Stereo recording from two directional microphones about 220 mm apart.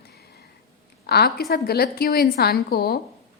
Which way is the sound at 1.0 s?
45° left (ahead or behind).